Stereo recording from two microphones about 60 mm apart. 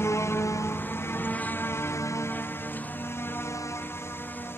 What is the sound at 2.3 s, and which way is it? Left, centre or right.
Music, left.